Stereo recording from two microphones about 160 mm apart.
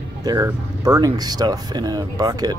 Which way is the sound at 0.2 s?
25° right (ahead or behind).